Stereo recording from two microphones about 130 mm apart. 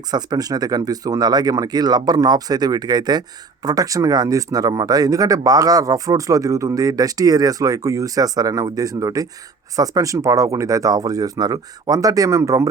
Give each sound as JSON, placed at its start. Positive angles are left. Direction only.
{"t": 0.1, "sound": "speech", "side_deg": -30}